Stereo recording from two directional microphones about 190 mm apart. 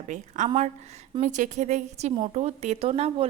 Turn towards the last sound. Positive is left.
turn(degrees=-30)  # may be behind; listen again after turning